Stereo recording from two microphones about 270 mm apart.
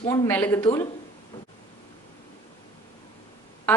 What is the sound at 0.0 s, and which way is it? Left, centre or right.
Speech, centre.